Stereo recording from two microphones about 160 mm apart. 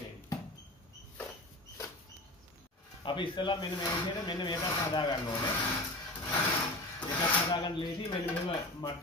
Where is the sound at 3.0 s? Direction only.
30° left (ahead or behind).